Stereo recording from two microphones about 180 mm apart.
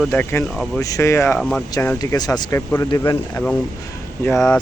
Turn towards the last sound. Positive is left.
turn(degrees=5)  # may be behind; listen again after turning